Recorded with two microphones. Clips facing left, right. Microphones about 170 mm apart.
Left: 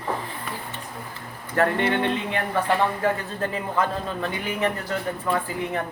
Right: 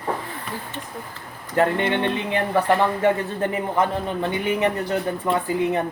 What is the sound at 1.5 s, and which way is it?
A man's voice, 20° right (ahead or behind).